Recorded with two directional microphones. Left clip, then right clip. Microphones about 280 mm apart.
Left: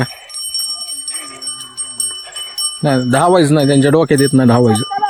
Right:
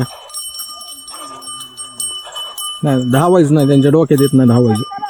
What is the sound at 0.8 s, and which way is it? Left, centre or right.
Jingle bell, left.